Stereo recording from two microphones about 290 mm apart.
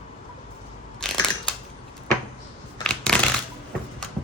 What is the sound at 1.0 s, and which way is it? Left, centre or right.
Crushing, centre.